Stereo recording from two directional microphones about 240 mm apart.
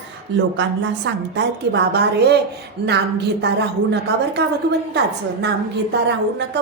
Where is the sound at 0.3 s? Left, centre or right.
Right.